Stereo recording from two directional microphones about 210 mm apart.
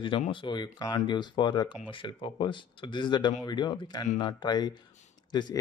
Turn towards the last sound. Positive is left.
turn(degrees=20)  # may be behind; listen again after turning